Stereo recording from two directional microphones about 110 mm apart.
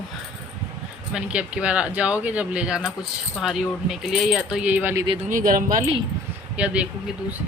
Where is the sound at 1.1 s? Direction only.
10° right (ahead or behind).